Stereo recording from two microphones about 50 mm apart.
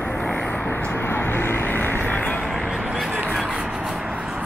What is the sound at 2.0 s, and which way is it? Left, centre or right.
Vehicle, left.